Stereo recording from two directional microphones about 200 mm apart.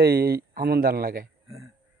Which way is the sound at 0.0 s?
50° right (ahead or behind).